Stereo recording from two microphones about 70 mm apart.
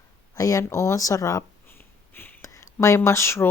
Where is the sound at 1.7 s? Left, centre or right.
Left.